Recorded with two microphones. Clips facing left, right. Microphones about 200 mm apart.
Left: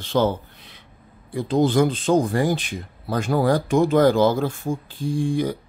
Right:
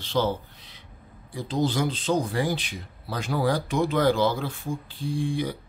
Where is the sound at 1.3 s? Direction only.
55° left (ahead or behind).